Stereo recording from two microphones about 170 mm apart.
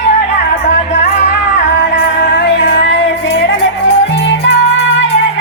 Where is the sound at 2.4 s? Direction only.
90° left.